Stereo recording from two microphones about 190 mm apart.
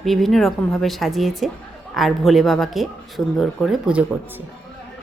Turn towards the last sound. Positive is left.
turn(degrees=-5)  # may be behind; listen again after turning